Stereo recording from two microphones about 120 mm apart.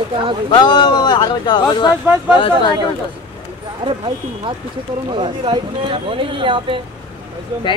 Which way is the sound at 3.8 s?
45° right (ahead or behind).